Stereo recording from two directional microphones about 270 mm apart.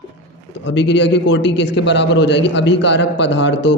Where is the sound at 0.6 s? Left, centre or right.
Left.